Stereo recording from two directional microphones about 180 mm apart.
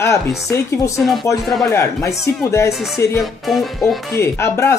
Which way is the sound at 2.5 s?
15° left (ahead or behind).